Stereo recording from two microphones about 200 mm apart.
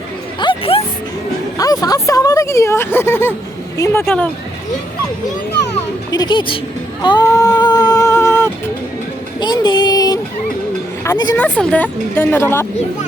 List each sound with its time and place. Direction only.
0.3 s music: 25° left (ahead or behind)
1.5 s speech: 20° left (ahead or behind)
6.1 s speech: 20° left (ahead or behind)
7.0 s a sound: 20° left (ahead or behind)
11.0 s speech: 15° left (ahead or behind)
11.3 s speech: 5° left (ahead or behind)